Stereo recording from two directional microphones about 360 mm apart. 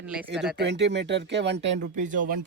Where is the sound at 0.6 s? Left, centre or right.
Right.